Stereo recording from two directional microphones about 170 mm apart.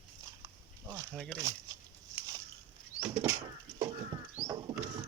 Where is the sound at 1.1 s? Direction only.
5° left (ahead or behind).